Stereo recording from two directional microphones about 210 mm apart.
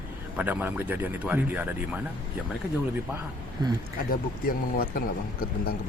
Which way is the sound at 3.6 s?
20° right (ahead or behind).